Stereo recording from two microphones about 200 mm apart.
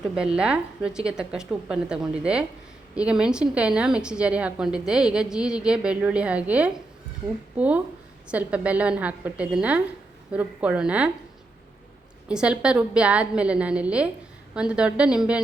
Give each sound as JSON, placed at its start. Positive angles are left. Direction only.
{"t": 0.2, "sound": "a woman's voice", "side_deg": -5}
{"t": 12.3, "sound": "a woman's voice", "side_deg": -5}